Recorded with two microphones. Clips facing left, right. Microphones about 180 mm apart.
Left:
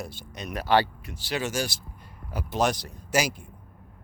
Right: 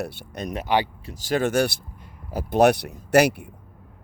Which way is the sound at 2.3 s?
45° right (ahead or behind).